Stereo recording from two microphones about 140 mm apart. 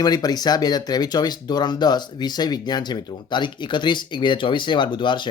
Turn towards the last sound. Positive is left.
turn(degrees=35)  # may be behind; listen again after turning